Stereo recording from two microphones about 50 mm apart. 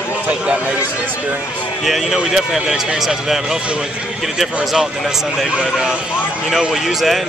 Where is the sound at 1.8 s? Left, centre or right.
Centre.